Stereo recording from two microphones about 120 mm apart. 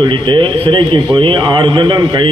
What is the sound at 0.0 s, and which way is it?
A man's voice, 40° right (ahead or behind).